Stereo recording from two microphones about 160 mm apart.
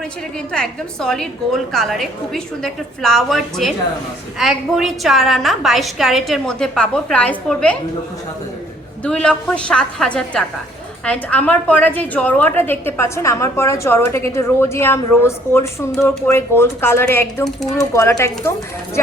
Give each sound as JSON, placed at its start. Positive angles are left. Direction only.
{"t": 0.5, "sound": "a woman's voice", "side_deg": 5}
{"t": 9.0, "sound": "a woman's voice", "side_deg": 5}